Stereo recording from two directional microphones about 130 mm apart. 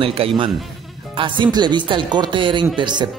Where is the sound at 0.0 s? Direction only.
45° right (ahead or behind).